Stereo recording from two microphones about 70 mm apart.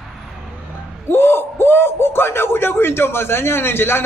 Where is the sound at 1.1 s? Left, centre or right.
Left.